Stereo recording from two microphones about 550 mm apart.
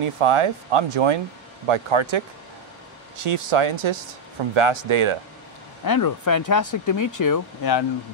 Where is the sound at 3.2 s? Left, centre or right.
Right.